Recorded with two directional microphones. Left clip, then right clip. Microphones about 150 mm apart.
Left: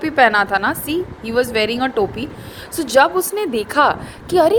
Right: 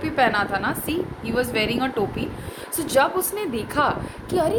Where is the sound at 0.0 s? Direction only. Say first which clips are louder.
Left 7 dB; 55° left (ahead or behind).